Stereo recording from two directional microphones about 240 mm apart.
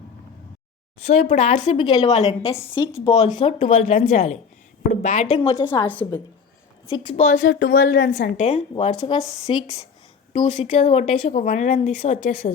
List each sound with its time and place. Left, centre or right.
1.0 s speech: left
5.6 s a woman's voice: centre
6.8 s speech: left
7.4 s a woman's voice: left